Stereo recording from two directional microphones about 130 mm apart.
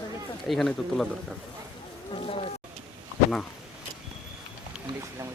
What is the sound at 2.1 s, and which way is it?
Speech, 50° left (ahead or behind).